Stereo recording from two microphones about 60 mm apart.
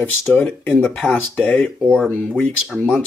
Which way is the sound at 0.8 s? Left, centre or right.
Centre.